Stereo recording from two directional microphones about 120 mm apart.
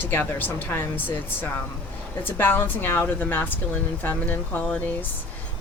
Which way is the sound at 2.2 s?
15° left (ahead or behind).